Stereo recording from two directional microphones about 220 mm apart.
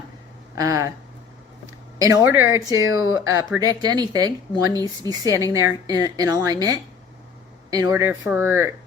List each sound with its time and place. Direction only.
0.5 s speech: 15° right (ahead or behind)
2.0 s speech: 15° right (ahead or behind)